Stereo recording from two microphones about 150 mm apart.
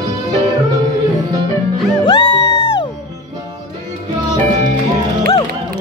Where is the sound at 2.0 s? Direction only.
35° left (ahead or behind).